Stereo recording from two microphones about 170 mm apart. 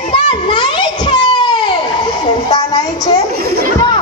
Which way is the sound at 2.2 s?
25° left (ahead or behind).